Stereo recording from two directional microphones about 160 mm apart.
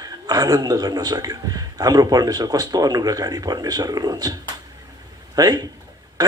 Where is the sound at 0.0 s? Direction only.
25° right (ahead or behind).